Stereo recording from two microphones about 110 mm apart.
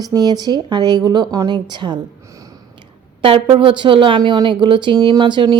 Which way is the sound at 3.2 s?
50° right (ahead or behind).